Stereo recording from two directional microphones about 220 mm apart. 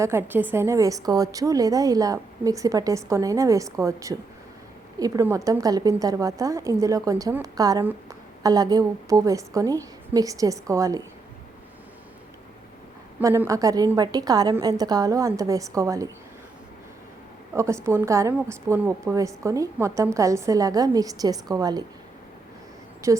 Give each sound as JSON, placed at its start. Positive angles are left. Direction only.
{"t": 0.0, "sound": "a woman's voice", "side_deg": -10}
{"t": 13.1, "sound": "a woman's voice", "side_deg": -10}
{"t": 17.5, "sound": "a woman's voice", "side_deg": -10}
{"t": 23.0, "sound": "a woman's voice", "side_deg": -15}